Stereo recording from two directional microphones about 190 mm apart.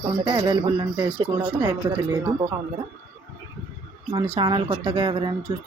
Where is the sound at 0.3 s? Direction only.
20° right (ahead or behind).